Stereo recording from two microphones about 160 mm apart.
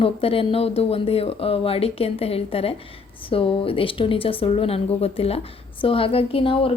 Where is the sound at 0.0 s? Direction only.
35° left (ahead or behind).